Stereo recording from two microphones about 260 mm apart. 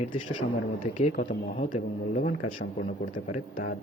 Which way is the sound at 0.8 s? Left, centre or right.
Left.